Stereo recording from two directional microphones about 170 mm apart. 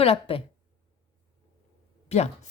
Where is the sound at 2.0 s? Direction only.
40° left (ahead or behind).